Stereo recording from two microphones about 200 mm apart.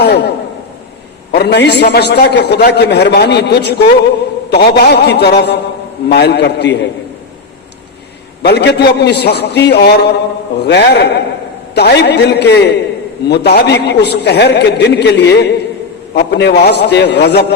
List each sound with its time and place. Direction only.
0.0 s a sound: 55° left (ahead or behind)
1.3 s a man's voice: 55° left (ahead or behind)
8.4 s a man's voice: 55° left (ahead or behind)